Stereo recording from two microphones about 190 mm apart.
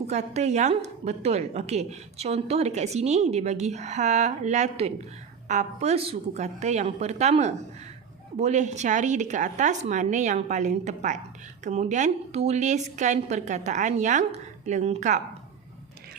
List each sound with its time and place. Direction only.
0.1 s a woman's voice: 35° right (ahead or behind)